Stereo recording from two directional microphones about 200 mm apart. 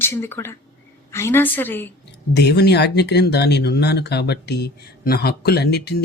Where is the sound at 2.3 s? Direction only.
55° left (ahead or behind).